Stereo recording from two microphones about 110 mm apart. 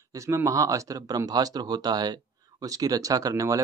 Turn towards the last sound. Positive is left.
turn(degrees=-30)  # may be behind; listen again after turning